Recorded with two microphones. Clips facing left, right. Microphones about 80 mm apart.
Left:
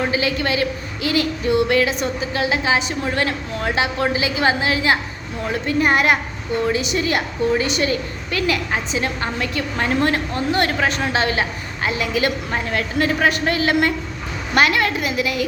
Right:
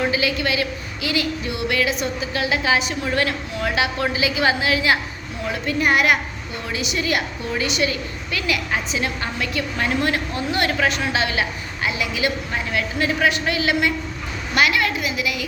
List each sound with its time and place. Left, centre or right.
0.1 s a woman's voice: left